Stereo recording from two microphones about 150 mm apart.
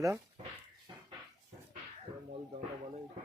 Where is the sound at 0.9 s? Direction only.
25° right (ahead or behind).